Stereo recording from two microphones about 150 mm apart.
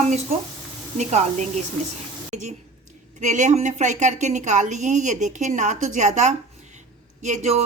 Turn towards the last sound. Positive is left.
turn(degrees=-50)  # may be behind; listen again after turning